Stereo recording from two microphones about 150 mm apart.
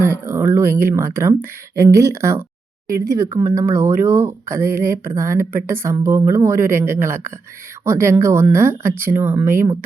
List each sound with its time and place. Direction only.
0.0 s speech: 15° right (ahead or behind)